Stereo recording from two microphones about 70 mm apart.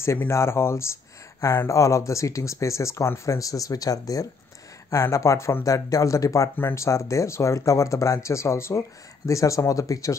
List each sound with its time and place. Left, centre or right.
0.3 s speech: left
4.9 s speech: left